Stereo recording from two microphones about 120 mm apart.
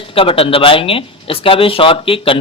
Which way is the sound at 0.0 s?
50° left (ahead or behind).